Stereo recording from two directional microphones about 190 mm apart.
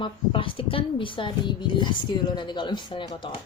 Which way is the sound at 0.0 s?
25° left (ahead or behind).